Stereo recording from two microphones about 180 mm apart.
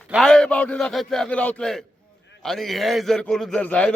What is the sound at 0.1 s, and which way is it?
A man's voice, centre (ahead or behind).